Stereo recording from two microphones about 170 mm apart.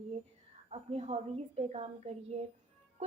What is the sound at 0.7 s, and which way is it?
Speech, 40° right (ahead or behind).